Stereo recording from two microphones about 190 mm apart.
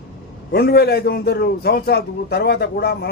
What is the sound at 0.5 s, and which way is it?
A man's voice, 55° left (ahead or behind).